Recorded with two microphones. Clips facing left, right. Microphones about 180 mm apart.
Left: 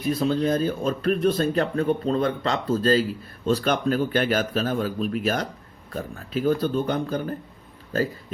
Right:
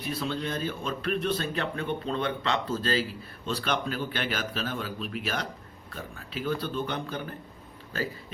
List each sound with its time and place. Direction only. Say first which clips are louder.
0.1 s speech: left 10 dB; 40° left (ahead or behind)